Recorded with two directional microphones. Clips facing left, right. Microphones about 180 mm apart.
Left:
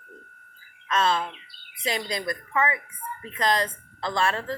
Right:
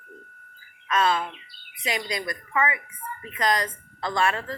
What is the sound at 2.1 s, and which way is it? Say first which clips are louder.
A woman's voice: left 1 dB; 30° left (ahead or behind).